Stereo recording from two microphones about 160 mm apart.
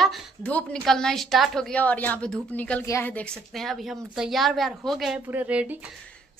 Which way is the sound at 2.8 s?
20° left (ahead or behind).